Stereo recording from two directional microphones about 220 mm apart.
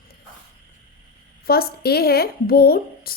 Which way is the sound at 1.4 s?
45° left (ahead or behind).